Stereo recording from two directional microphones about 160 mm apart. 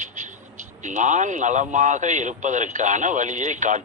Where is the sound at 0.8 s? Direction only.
50° right (ahead or behind).